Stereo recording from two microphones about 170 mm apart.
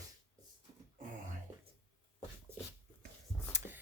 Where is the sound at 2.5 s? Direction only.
15° right (ahead or behind).